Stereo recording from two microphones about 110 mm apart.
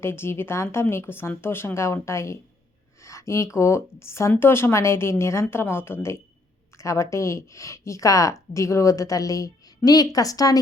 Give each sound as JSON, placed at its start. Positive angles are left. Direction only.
{"t": 0.0, "sound": "speech", "side_deg": 20}